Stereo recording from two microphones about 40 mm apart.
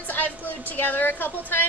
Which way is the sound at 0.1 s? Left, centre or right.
Left.